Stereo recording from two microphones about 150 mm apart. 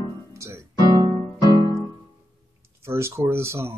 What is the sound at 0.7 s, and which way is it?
Piano, 25° left (ahead or behind).